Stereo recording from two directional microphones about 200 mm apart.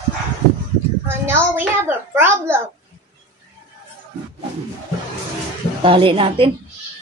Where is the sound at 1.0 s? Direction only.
10° right (ahead or behind).